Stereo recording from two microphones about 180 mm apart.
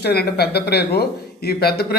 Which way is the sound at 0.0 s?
60° left (ahead or behind).